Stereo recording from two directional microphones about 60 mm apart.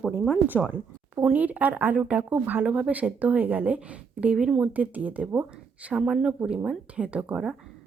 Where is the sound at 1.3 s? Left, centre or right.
Right.